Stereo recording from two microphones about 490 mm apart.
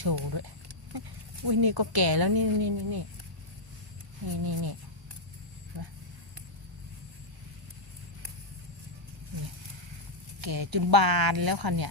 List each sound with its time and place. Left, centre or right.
0.0 s speech: right
4.3 s speech: right
10.4 s speech: right